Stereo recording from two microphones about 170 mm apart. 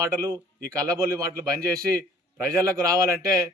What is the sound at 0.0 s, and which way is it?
A man's voice, 20° right (ahead or behind).